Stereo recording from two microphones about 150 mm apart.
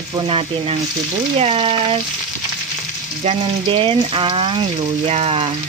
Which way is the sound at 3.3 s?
35° right (ahead or behind).